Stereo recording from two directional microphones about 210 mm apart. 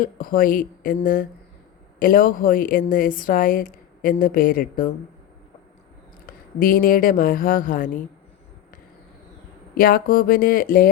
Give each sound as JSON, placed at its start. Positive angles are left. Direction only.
{"t": 0.0, "sound": "a woman's voice", "side_deg": 45}
{"t": 6.6, "sound": "a woman's voice", "side_deg": 45}
{"t": 9.7, "sound": "a woman's voice", "side_deg": 45}